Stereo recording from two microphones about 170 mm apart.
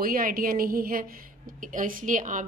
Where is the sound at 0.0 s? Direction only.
60° right (ahead or behind).